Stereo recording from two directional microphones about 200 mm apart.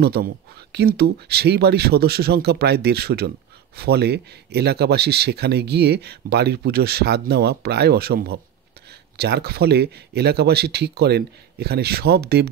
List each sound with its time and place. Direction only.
0.0 s speech: 50° right (ahead or behind)